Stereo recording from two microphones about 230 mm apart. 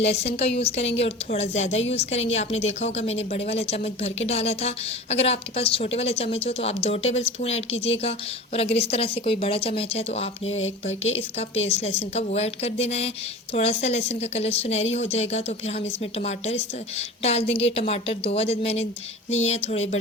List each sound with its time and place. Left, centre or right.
0.0 s a woman's voice: left